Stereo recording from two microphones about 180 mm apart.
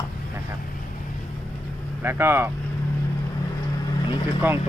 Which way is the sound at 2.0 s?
15° right (ahead or behind).